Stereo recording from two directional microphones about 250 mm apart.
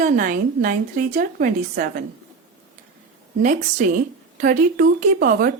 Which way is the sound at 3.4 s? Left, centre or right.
Right.